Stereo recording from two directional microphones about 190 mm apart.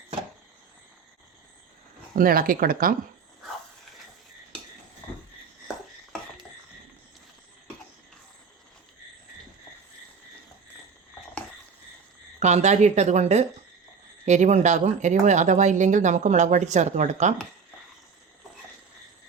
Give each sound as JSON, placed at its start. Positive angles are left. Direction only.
{"t": 2.1, "sound": "speech", "side_deg": -50}
{"t": 12.4, "sound": "speech", "side_deg": -35}